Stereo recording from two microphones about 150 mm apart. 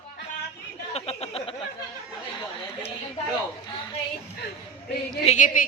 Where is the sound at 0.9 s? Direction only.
45° left (ahead or behind).